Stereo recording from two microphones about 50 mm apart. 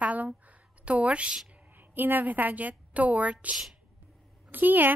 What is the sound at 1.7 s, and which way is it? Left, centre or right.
A woman's voice, right.